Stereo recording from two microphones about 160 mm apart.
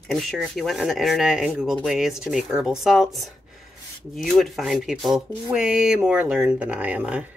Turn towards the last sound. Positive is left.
turn(degrees=-10)  # may be behind; listen again after turning